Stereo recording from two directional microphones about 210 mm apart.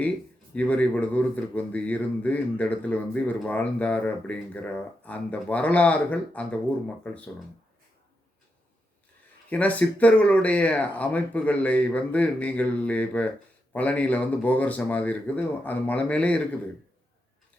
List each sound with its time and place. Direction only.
0.5 s speech: 5° left (ahead or behind)
9.5 s speech: 5° left (ahead or behind)